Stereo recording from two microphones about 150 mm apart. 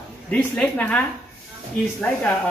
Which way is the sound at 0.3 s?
10° left (ahead or behind).